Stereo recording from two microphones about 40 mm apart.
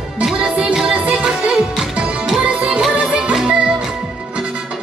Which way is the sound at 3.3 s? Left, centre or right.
Centre.